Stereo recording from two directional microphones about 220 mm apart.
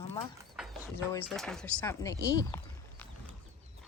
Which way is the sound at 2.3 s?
15° left (ahead or behind).